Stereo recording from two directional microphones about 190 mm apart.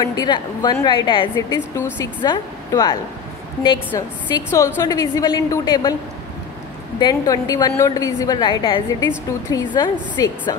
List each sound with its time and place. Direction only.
0.0 s a woman's voice: 20° left (ahead or behind)
1.3 s a woman's voice: 15° left (ahead or behind)
7.0 s a woman's voice: 20° left (ahead or behind)